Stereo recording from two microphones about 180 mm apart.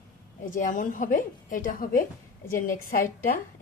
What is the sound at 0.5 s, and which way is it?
A woman's voice, 45° left (ahead or behind).